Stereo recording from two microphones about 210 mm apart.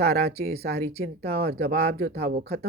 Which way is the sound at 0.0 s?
50° right (ahead or behind).